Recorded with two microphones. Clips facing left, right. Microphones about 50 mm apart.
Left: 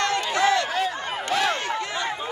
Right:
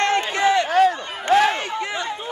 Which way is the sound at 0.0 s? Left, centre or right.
Right.